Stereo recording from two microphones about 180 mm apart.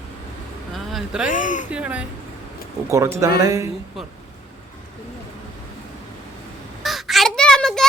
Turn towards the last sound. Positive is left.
turn(degrees=5)  # may be behind; listen again after turning